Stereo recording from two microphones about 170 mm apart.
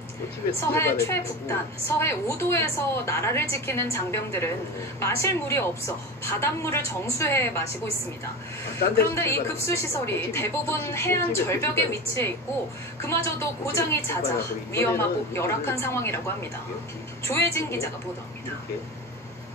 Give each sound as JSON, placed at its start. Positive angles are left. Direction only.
{"t": 0.6, "sound": "a woman's voice", "side_deg": 15}
{"t": 9.1, "sound": "a woman's voice", "side_deg": 15}